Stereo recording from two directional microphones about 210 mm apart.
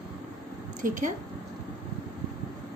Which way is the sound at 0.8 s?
40° right (ahead or behind).